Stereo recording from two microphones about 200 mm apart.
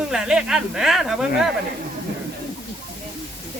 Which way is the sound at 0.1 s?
5° right (ahead or behind).